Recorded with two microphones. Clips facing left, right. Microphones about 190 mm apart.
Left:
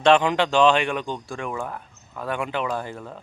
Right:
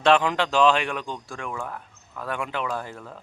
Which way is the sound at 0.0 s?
Centre (ahead or behind).